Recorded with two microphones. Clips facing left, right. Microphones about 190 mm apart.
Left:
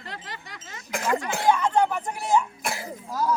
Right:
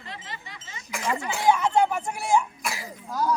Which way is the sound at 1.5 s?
10° right (ahead or behind).